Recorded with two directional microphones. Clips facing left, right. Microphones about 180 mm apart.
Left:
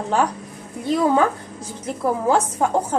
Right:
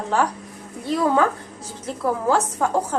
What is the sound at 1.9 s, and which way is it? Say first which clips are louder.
A woman's voice: left 1 dB; 20° left (ahead or behind).